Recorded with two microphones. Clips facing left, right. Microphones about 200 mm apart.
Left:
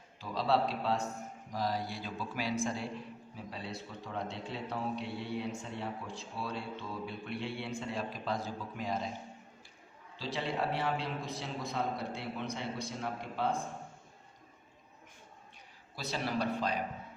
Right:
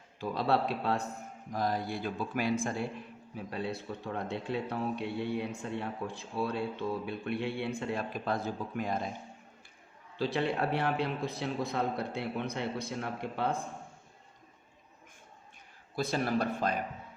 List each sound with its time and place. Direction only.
0.2 s a man's voice: 55° right (ahead or behind)
10.2 s a man's voice: 60° right (ahead or behind)
16.0 s a man's voice: 50° right (ahead or behind)